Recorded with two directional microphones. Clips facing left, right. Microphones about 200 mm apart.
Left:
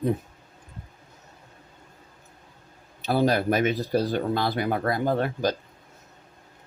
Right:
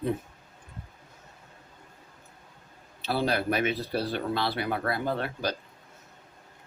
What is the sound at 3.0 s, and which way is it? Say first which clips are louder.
Speech: left 5 dB; 45° left (ahead or behind).